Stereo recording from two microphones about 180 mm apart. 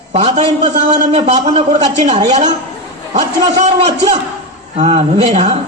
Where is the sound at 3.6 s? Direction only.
40° right (ahead or behind).